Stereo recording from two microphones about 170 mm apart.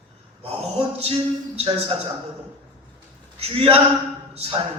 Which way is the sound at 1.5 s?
30° right (ahead or behind).